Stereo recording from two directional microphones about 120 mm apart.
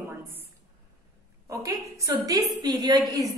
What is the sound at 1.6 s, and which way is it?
Speech, 25° right (ahead or behind).